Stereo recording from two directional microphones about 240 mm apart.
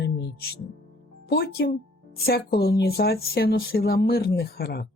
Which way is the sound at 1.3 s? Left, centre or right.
Left.